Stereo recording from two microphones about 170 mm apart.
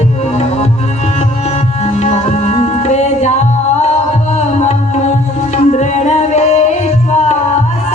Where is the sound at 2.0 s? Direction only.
40° left (ahead or behind).